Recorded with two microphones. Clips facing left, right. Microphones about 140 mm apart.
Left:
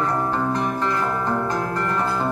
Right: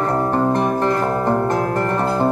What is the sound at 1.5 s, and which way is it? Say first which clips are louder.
Music: right 5 dB; 55° right (ahead or behind).